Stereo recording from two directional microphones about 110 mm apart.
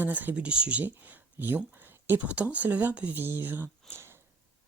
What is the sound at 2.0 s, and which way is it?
Speech, 15° right (ahead or behind).